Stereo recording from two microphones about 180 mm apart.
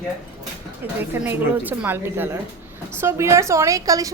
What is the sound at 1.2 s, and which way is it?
A woman's voice, 10° right (ahead or behind).